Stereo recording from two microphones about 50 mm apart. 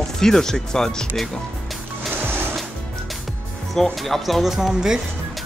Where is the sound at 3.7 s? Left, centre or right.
Centre.